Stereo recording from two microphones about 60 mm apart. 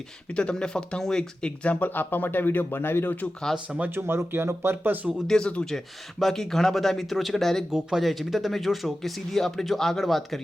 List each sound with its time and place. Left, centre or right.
0.3 s speech: centre; by 3.2 s left
3.9 s speech: right
5.3 s speech: centre
5.7 s speech: centre
7.7 s speech: centre